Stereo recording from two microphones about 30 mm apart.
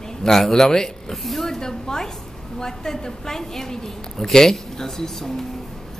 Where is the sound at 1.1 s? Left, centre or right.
Centre.